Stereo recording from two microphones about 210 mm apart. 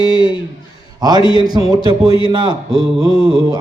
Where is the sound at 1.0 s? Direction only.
20° right (ahead or behind).